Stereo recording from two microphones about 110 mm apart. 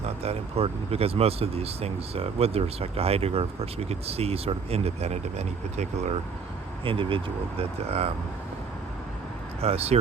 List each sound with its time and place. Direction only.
0.0 s speech: 70° right (ahead or behind); by 6.1 s 90° right
6.8 s speech: 50° right (ahead or behind)
7.6 s speech: 70° right (ahead or behind)
9.6 s speech: 65° right (ahead or behind)